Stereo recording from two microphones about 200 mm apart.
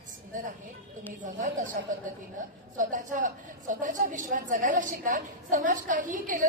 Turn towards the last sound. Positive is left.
turn(degrees=-40)  # may be behind; listen again after turning